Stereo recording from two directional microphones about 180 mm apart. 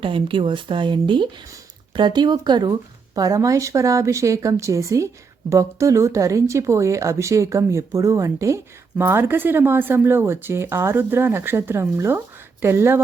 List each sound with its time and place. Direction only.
0.0 s speech: 30° right (ahead or behind); by 13.0 s 15° right (ahead or behind)